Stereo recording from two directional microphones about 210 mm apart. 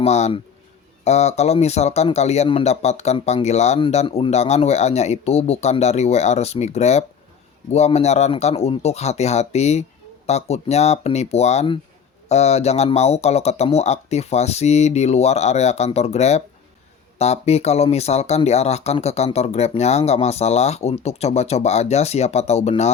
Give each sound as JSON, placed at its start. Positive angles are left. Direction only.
{"t": 0.0, "sound": "speech", "side_deg": 30}